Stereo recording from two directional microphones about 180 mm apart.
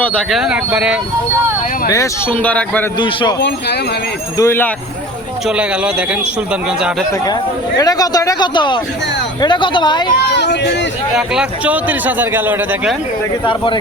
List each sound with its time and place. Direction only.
0.0 s speech: 5° left (ahead or behind)
1.9 s speech: 15° left (ahead or behind)
3.0 s speech: 25° left (ahead or behind)
4.4 s speech: 15° left (ahead or behind)
5.5 s a man's voice: 5° right (ahead or behind)
7.8 s speech: 20° left (ahead or behind)
10.2 s speech: 70° left (ahead or behind)
11.1 s a man's voice: 5° right (ahead or behind)
13.4 s speech: 25° left (ahead or behind)